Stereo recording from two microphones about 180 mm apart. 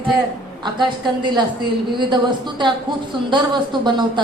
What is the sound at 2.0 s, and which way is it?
A woman's voice, 25° right (ahead or behind).